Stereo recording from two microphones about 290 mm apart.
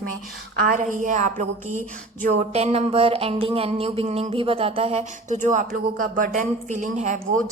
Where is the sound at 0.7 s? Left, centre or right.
Right.